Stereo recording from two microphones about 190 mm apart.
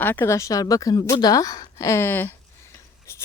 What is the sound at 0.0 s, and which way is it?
A woman's voice, 10° left (ahead or behind).